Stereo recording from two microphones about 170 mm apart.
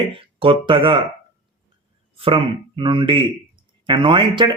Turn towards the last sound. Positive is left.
turn(degrees=-30)  # may be behind; listen again after turning